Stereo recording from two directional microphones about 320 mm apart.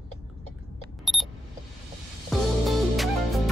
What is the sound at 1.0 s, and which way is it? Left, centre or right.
Alarm clock, centre.